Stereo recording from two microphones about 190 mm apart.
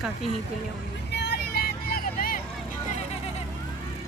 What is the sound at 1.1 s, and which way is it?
Vehicle, 60° left (ahead or behind).